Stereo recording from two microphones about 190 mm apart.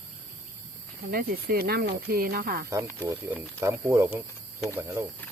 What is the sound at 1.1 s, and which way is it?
Speech, 50° right (ahead or behind).